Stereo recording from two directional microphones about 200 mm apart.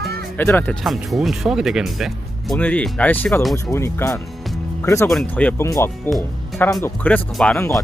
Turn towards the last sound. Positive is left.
turn(degrees=10)  # may be behind; listen again after turning